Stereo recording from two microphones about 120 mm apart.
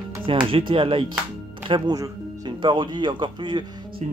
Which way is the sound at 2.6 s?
45° right (ahead or behind).